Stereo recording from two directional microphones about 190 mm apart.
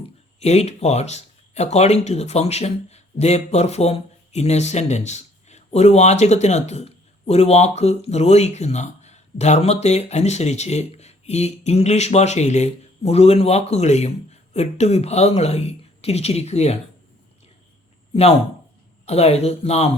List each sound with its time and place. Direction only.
0.3 s speech: 35° left (ahead or behind)
18.1 s speech: 30° left (ahead or behind)